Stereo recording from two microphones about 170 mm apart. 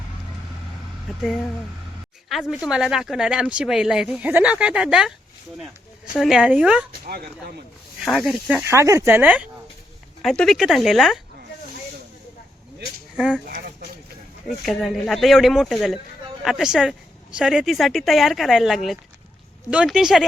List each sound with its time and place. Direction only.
1.1 s speech: centre (ahead or behind)
2.3 s speech: centre (ahead or behind)
6.1 s speech: 5° right (ahead or behind)
7.0 s speech: 60° right (ahead or behind)
8.0 s speech: centre (ahead or behind)
8.7 s speech: 15° right (ahead or behind)
10.2 s speech: centre (ahead or behind)
13.1 s speech: centre (ahead or behind)
13.5 s a sound: 60° right (ahead or behind)
14.6 s speech: centre (ahead or behind)